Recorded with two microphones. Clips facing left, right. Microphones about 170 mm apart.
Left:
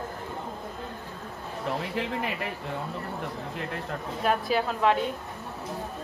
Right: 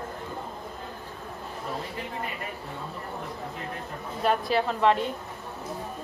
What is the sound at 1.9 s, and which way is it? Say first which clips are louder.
Speech: left 5 dB; 85° left.